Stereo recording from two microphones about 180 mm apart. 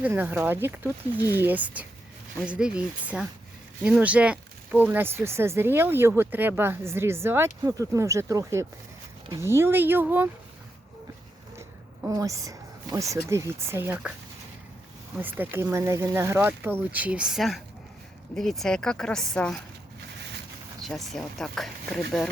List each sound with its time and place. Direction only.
0.0 s speech: 10° right (ahead or behind)
12.0 s speech: 20° right (ahead or behind)
15.2 s speech: 10° right (ahead or behind)
20.8 s speech: centre (ahead or behind)